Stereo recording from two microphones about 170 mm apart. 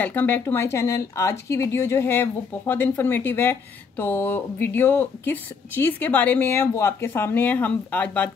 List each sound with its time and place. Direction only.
0.0 s speech: 10° left (ahead or behind)